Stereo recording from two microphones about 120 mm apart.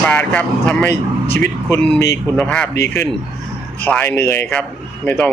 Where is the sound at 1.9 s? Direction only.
25° left (ahead or behind).